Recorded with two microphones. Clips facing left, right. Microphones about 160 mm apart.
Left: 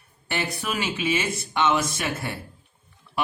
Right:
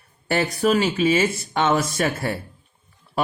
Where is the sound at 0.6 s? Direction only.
40° right (ahead or behind).